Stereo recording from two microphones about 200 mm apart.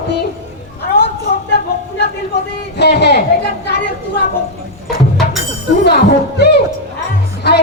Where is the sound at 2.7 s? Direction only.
55° left (ahead or behind).